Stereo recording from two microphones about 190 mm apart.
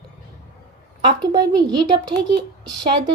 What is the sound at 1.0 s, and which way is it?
A woman's voice, 25° right (ahead or behind).